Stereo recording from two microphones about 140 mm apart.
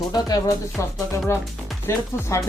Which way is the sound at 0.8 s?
20° left (ahead or behind).